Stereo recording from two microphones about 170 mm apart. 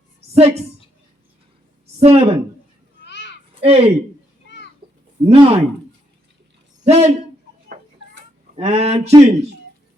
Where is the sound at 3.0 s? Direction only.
90° left.